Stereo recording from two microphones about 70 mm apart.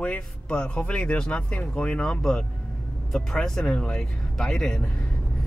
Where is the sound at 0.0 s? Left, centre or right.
Centre.